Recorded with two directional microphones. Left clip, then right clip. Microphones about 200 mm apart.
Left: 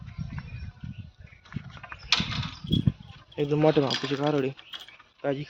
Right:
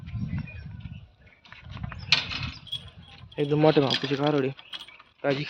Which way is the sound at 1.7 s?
55° right (ahead or behind).